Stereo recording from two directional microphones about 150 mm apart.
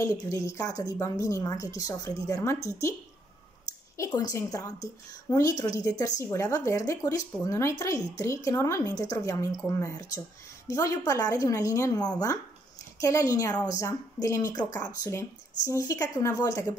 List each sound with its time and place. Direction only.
0.0 s a woman's voice: 20° left (ahead or behind)
4.0 s a woman's voice: 25° left (ahead or behind)